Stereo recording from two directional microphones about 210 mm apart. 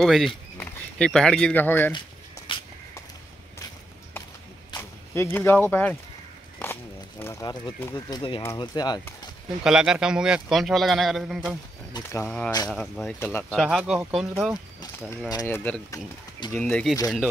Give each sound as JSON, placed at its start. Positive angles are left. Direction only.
{"t": 0.0, "sound": "a man's voice", "side_deg": 0}
{"t": 2.5, "sound": "a sound", "side_deg": 25}
{"t": 4.6, "sound": "speech", "side_deg": 15}
{"t": 9.6, "sound": "a man's voice", "side_deg": -5}
{"t": 11.9, "sound": "a man's voice", "side_deg": 15}
{"t": 15.2, "sound": "speech", "side_deg": 15}